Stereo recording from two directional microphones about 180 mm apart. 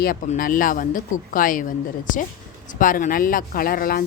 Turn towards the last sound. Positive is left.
turn(degrees=55)  # may be behind; listen again after turning